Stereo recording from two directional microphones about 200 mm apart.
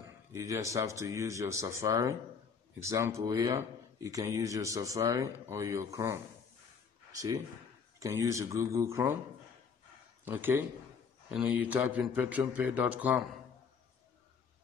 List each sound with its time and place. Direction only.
0.3 s speech: 15° right (ahead or behind)
7.1 s a sound: 15° right (ahead or behind)
8.0 s speech: 15° right (ahead or behind)
10.2 s speech: 10° right (ahead or behind)